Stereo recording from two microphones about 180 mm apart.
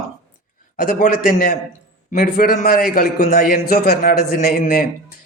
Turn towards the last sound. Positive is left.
turn(degrees=55)  # may be behind; listen again after turning